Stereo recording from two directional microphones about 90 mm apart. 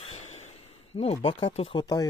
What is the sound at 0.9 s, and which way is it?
Speech, 90° left.